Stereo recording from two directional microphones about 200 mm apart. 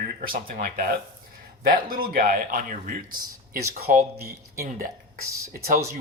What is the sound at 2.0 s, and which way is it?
Speech, 45° right (ahead or behind).